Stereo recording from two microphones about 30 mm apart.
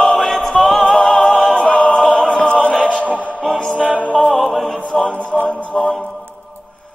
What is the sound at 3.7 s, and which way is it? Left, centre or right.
Music, right.